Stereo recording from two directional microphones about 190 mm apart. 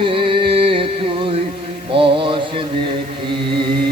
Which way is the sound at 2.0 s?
25° right (ahead or behind).